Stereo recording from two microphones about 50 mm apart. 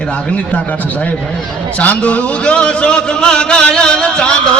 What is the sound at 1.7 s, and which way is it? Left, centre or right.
A man's voice, left.